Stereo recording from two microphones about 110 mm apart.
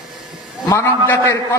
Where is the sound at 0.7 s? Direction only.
20° left (ahead or behind).